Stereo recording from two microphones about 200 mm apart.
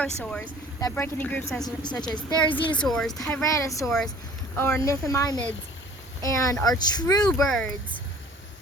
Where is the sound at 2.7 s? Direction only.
Centre (ahead or behind).